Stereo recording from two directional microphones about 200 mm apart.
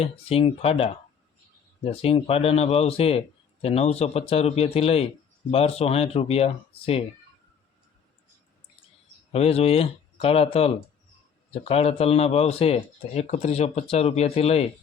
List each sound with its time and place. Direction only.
0.0 s speech: 30° left (ahead or behind)
9.3 s speech: 30° left (ahead or behind)